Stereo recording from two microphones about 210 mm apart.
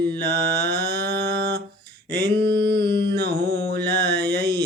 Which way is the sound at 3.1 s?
50° right (ahead or behind).